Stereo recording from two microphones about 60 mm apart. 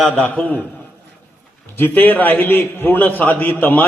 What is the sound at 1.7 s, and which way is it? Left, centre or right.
A man's voice, left.